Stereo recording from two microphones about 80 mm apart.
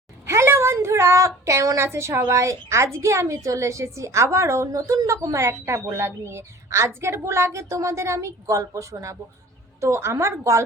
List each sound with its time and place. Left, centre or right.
0.3 s a woman's voice: right